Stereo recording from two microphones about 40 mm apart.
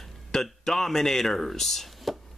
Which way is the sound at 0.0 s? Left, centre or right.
Centre.